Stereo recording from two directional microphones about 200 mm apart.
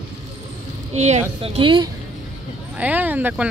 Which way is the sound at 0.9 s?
35° right (ahead or behind).